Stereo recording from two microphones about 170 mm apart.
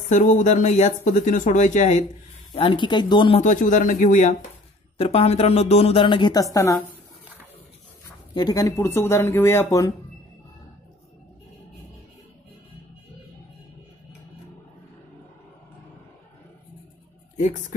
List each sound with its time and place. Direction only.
0.1 s speech: 45° left (ahead or behind)
2.5 s speech: 30° left (ahead or behind)
3.3 s speech: 50° left (ahead or behind)
4.9 s speech: 35° left (ahead or behind); by 6.8 s 20° left (ahead or behind)
8.4 s speech: 20° left (ahead or behind)